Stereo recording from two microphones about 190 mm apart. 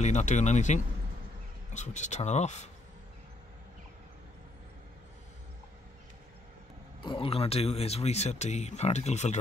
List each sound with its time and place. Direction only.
0.0 s speech: 40° left (ahead or behind)
7.0 s speech: 25° left (ahead or behind)